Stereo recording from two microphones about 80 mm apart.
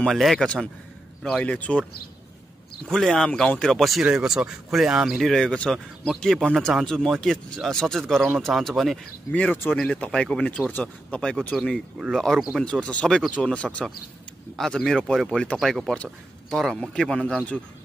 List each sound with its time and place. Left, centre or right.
0.0 s speech: centre
1.4 s speech: centre
2.9 s speech: centre
4.0 s speech: centre
9.3 s speech: centre
14.6 s speech: centre
15.9 s speech: centre